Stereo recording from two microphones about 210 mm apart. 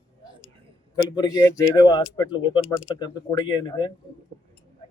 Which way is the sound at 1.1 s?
20° left (ahead or behind).